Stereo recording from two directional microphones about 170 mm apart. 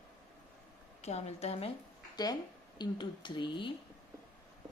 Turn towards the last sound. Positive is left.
turn(degrees=30)  # may be behind; listen again after turning